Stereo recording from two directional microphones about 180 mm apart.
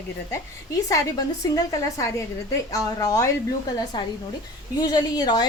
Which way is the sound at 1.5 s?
20° left (ahead or behind).